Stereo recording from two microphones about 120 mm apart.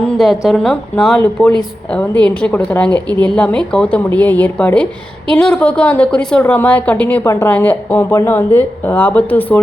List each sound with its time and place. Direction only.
0.2 s a woman's voice: centre (ahead or behind)
7.3 s a woman's voice: 25° left (ahead or behind)
7.5 s a woman's voice: 15° left (ahead or behind)